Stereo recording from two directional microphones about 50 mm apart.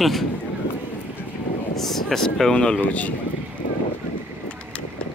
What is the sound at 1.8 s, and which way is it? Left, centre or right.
Speech, centre.